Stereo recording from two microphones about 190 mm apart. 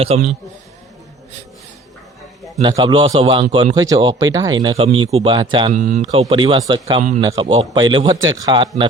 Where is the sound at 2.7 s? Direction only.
25° right (ahead or behind).